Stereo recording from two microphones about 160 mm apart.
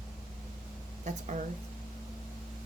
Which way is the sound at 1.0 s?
50° right (ahead or behind).